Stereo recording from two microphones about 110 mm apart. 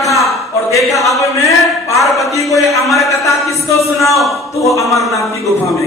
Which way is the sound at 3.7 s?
25° left (ahead or behind).